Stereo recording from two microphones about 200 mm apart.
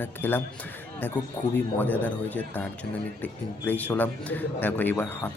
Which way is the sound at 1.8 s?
10° left (ahead or behind).